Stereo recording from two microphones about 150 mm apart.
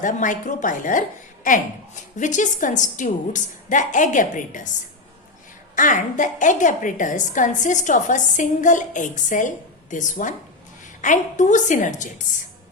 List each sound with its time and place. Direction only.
0.0 s a woman's voice: 60° left (ahead or behind)
2.1 s a woman's voice: 55° left (ahead or behind)
5.7 s a woman's voice: 60° left (ahead or behind)